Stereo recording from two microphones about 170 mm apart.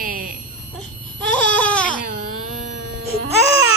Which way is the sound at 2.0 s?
55° right (ahead or behind).